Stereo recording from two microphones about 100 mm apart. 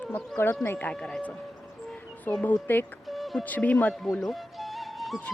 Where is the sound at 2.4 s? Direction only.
20° left (ahead or behind).